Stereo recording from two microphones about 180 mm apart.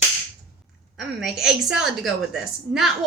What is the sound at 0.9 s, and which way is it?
A woman's voice, 5° right (ahead or behind).